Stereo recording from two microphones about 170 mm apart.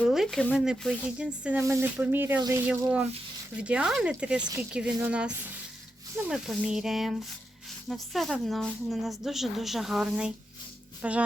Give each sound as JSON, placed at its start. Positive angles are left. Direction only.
{"t": 0.1, "sound": "speech", "side_deg": 0}